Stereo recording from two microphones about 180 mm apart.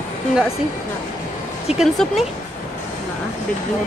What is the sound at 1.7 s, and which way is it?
Speech, centre (ahead or behind).